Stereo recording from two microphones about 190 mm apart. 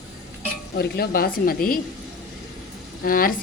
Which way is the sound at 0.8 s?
55° left (ahead or behind).